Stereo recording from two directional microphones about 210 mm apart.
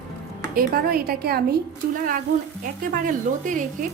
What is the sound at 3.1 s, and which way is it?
Speech, 40° right (ahead or behind).